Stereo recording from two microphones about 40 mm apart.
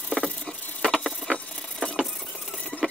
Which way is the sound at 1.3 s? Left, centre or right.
Left.